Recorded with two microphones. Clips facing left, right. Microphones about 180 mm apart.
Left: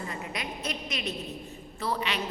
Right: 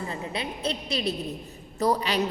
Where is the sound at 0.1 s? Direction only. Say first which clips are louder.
Right 4 dB; 30° right (ahead or behind).